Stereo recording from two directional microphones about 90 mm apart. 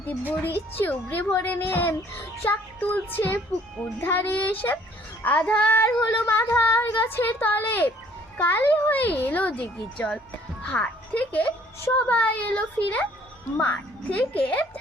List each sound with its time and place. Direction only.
0.4 s a child's voice: 25° left (ahead or behind)